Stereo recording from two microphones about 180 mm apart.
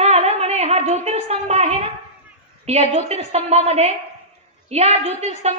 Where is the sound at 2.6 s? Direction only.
40° right (ahead or behind).